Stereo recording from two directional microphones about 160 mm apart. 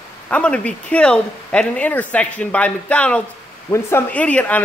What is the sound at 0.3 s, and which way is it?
Speech, 5° left (ahead or behind).